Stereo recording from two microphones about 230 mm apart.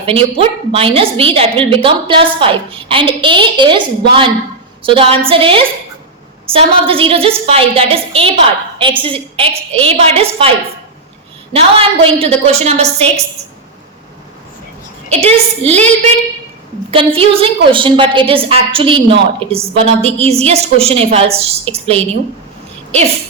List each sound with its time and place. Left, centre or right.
0.0 s a woman's voice: right
11.5 s a woman's voice: right
15.2 s a woman's voice: right